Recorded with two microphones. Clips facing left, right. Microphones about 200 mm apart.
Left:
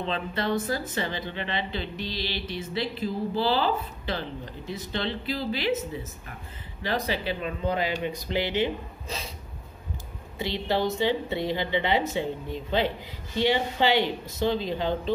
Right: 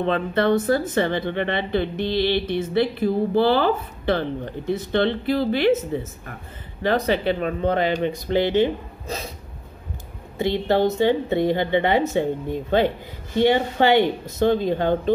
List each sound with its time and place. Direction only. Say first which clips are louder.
0.0 s speech: right 9 dB; 60° right (ahead or behind)
6.8 s a woman's voice: right 8 dB; 55° right (ahead or behind)
10.4 s a woman's voice: right 7 dB; 50° right (ahead or behind)